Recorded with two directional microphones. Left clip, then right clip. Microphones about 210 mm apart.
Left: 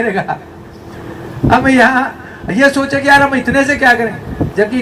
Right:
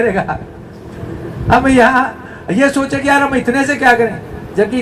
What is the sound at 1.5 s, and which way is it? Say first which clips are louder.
A man's voice: even; 25° left (ahead or behind).